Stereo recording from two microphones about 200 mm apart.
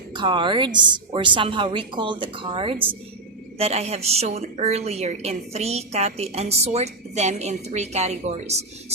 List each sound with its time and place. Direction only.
0.1 s a woman's voice: 25° right (ahead or behind)